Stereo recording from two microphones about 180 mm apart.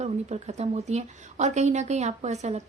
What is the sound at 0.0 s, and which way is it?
A woman's voice, 40° right (ahead or behind).